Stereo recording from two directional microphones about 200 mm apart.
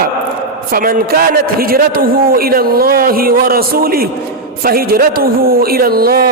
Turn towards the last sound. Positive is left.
turn(degrees=-50)  # may be behind; listen again after turning